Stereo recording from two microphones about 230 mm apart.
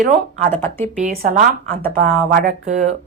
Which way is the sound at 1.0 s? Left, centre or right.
Right.